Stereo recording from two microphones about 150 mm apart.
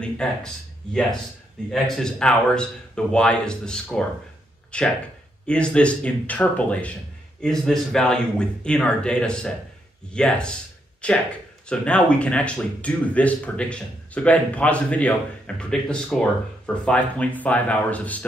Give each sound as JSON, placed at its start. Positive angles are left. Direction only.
{"t": 0.0, "sound": "speech", "side_deg": 5}
{"t": 1.7, "sound": "a man's voice", "side_deg": 5}